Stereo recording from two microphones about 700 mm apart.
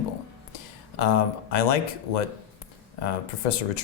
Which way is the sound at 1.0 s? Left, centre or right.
Left.